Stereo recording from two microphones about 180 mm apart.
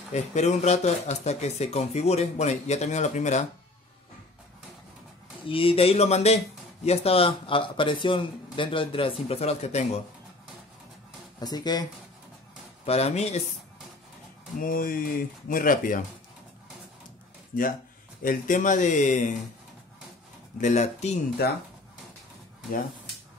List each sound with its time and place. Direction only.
0.1 s speech: 40° left (ahead or behind)
5.5 s speech: 30° left (ahead or behind)
11.3 s speech: 25° left (ahead or behind)
12.8 s speech: 35° left (ahead or behind)
14.6 s speech: 50° left (ahead or behind)
17.5 s speech: 50° left (ahead or behind)
20.6 s speech: 40° left (ahead or behind)